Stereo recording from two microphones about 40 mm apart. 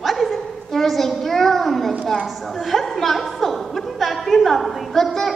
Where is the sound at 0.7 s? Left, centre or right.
Centre.